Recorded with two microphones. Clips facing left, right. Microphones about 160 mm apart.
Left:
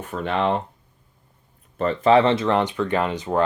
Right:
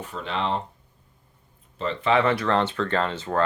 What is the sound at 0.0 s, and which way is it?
Speech, 55° left (ahead or behind).